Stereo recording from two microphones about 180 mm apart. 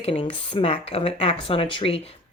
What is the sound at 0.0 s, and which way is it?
A woman's voice, 30° left (ahead or behind).